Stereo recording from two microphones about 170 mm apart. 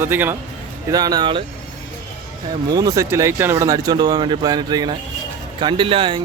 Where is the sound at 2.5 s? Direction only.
20° right (ahead or behind).